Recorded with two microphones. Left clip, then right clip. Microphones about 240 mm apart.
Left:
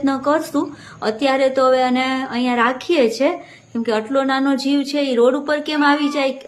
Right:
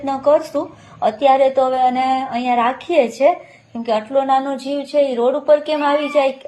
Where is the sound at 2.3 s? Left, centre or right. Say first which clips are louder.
Right 1 dB; left.